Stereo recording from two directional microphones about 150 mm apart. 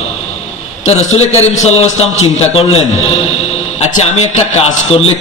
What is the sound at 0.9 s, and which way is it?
A man's voice, 45° left (ahead or behind).